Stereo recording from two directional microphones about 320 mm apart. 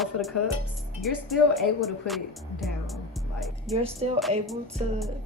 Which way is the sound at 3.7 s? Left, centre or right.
Centre.